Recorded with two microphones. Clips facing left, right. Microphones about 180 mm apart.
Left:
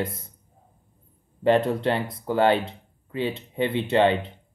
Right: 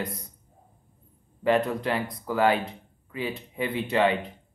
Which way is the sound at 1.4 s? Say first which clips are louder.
Left 3 dB; 25° left (ahead or behind).